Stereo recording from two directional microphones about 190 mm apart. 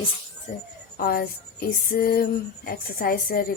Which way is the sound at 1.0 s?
50° left (ahead or behind).